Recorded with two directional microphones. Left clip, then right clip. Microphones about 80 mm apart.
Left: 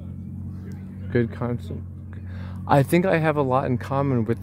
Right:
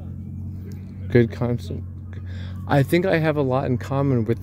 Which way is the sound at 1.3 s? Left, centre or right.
Right.